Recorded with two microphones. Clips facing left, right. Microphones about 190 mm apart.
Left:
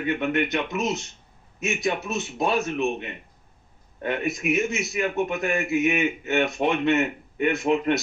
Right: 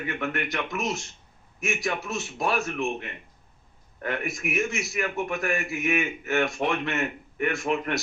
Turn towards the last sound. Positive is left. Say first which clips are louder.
# left 5 dB
turn(degrees=20)  # may be behind; listen again after turning